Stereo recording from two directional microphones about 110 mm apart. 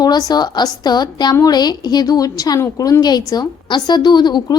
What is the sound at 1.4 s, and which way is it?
Music, 40° left (ahead or behind).